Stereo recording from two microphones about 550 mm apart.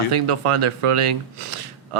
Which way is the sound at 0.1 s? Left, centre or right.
Right.